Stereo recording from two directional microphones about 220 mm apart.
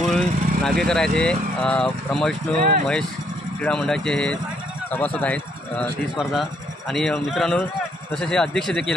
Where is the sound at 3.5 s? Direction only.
5° left (ahead or behind).